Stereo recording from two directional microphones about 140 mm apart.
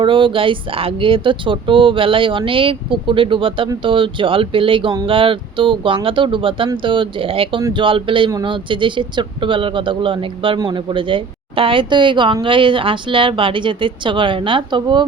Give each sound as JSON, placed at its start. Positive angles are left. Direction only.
{"t": 0.0, "sound": "speech", "side_deg": -35}